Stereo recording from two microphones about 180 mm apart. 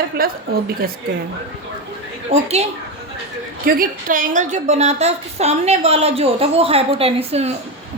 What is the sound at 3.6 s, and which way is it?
A woman's voice, 50° right (ahead or behind).